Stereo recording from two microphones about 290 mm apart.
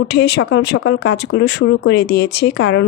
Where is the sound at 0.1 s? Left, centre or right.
Left.